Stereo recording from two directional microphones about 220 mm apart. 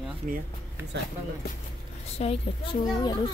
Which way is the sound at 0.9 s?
50° right (ahead or behind).